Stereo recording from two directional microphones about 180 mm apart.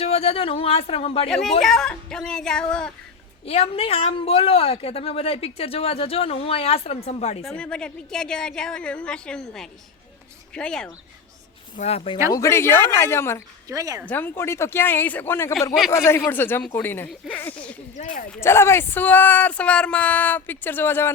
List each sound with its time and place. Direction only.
0.0 s speech: 35° left (ahead or behind)
1.3 s a woman's voice: centre (ahead or behind)
3.4 s speech: 35° left (ahead or behind)
7.4 s a woman's voice: 5° left (ahead or behind)
11.8 s speech: 35° left (ahead or behind)
12.3 s speech: 15° left (ahead or behind)
13.7 s speech: 20° right (ahead or behind)
14.1 s speech: 10° left (ahead or behind)
17.9 s speech: 45° left (ahead or behind)
18.3 s speech: 15° left (ahead or behind)